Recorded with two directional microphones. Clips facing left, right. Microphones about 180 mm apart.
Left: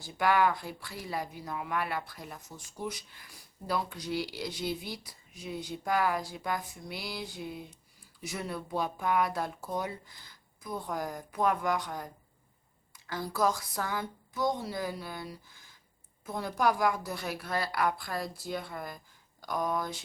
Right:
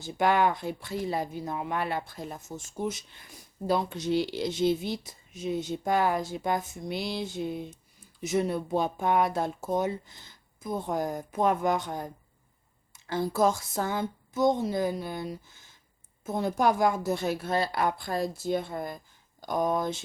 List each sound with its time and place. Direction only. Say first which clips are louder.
0.0 s speech: right 2 dB; 25° right (ahead or behind)